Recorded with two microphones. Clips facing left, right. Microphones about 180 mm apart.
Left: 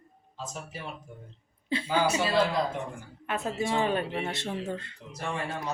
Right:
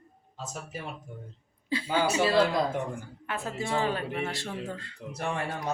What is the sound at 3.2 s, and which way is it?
Speech, 20° left (ahead or behind).